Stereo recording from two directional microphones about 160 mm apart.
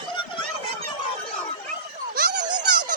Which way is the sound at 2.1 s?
80° right.